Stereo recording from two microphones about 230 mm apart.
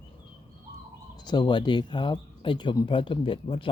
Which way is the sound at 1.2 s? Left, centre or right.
Centre.